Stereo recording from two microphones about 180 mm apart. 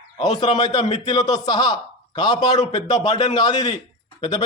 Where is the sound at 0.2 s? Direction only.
20° left (ahead or behind).